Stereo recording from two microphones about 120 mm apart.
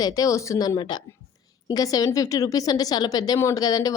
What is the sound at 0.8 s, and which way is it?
A woman's voice, 35° left (ahead or behind).